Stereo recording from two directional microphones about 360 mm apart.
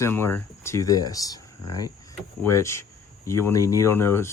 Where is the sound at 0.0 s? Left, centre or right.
Centre.